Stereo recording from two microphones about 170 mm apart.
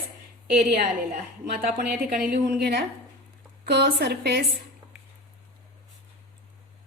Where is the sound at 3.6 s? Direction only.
80° right.